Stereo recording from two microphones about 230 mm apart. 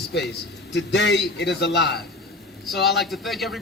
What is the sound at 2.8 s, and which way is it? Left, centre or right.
Speech, centre.